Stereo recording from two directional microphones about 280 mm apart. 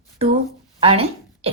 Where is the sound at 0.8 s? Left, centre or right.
Right.